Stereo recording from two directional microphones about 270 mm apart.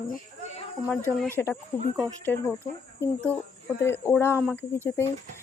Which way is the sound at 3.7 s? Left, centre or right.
Centre.